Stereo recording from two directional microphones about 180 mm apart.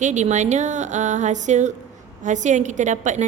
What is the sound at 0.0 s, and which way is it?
A woman's voice, 40° right (ahead or behind).